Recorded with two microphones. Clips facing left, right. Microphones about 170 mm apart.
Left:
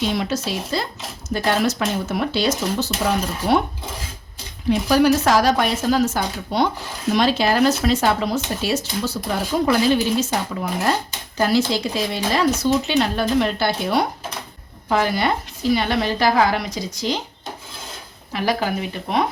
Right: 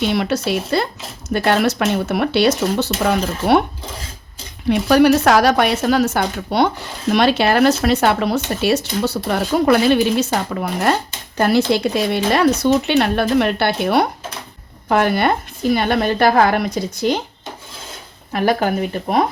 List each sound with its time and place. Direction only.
0.0 s a woman's voice: 65° right (ahead or behind)
4.7 s a woman's voice: 65° right (ahead or behind)
18.3 s speech: 50° right (ahead or behind)